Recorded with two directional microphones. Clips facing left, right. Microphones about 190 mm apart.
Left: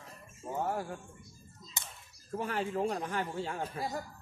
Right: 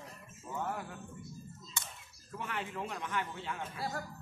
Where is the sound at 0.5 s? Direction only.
35° left (ahead or behind).